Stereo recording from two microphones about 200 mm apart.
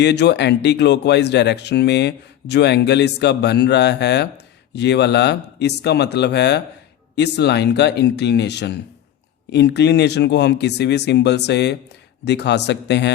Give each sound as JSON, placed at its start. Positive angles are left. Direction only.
{"t": 0.0, "sound": "speech", "side_deg": 60}